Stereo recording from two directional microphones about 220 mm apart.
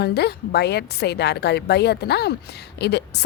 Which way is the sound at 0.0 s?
45° left (ahead or behind).